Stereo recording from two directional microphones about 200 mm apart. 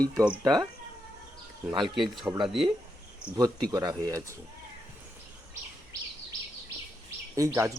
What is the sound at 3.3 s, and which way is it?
Speech, 15° right (ahead or behind).